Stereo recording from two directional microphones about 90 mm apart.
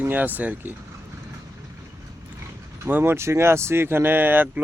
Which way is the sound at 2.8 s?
20° right (ahead or behind).